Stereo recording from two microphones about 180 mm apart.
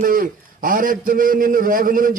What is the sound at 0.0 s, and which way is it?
A man's voice, 50° right (ahead or behind).